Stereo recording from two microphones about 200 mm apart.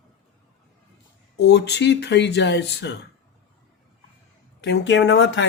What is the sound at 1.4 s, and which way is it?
Speech, 60° left (ahead or behind).